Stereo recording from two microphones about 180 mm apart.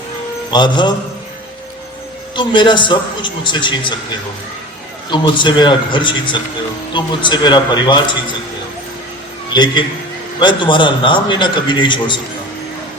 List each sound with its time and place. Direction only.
0.5 s a man's voice: 25° left (ahead or behind)
2.3 s a man's voice: 25° left (ahead or behind)
5.1 s a man's voice: 25° left (ahead or behind)
9.5 s a man's voice: 25° left (ahead or behind)